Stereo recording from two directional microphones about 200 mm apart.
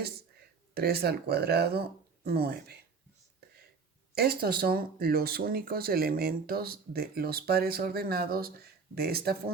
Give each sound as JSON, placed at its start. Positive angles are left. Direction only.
{"t": 0.7, "sound": "speech", "side_deg": -50}
{"t": 4.1, "sound": "speech", "side_deg": -50}